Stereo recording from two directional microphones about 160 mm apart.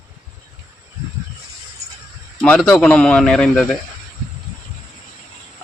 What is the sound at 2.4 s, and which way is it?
A man's voice, 5° left (ahead or behind).